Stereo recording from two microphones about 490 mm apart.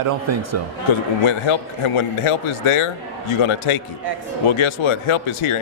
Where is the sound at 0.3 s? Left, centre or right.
Right.